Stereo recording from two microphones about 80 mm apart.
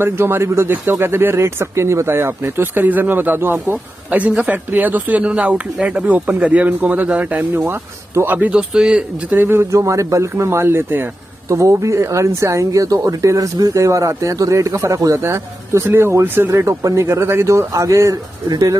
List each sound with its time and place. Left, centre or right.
0.0 s speech: right
7.5 s speech: right
8.4 s speech: centre
9.3 s speech: right